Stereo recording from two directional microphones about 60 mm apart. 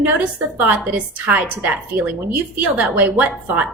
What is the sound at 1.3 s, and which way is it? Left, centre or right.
A woman's voice, right.